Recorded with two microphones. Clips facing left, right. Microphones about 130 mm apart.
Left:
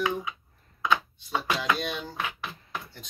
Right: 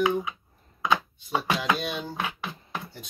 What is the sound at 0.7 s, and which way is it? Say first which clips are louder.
Chopping: right 1 dB; 15° right (ahead or behind).